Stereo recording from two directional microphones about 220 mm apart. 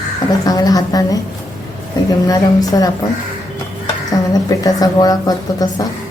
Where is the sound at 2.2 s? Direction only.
15° left (ahead or behind).